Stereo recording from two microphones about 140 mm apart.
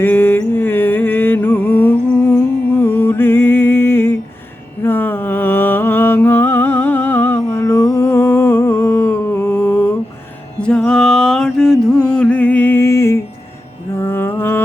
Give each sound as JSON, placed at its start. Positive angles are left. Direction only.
{"t": 0.0, "sound": "mantra", "side_deg": 15}
{"t": 11.5, "sound": "music", "side_deg": 5}
{"t": 13.9, "sound": "mantra", "side_deg": 15}